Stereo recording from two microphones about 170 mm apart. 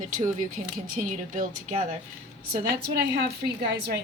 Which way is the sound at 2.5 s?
70° right (ahead or behind).